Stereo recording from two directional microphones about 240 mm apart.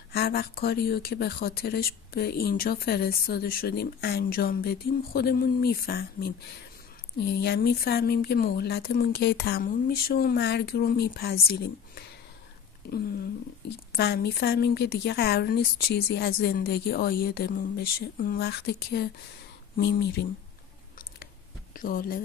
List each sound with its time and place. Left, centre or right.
0.1 s speech: left
12.8 s a sound: left
13.9 s speech: left
21.7 s speech: left